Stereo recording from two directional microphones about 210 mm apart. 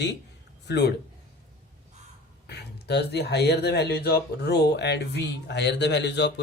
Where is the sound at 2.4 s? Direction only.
50° left (ahead or behind).